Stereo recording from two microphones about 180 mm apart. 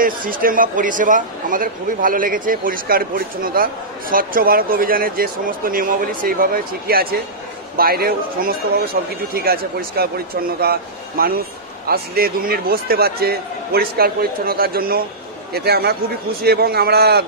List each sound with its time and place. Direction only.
0.0 s a man's voice: 50° right (ahead or behind)